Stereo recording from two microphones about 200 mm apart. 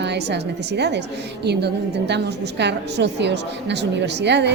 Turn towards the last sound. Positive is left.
turn(degrees=-60)  # may be behind; listen again after turning